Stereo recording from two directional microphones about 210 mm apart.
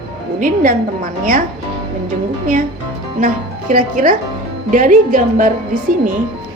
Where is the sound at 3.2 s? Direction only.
40° right (ahead or behind).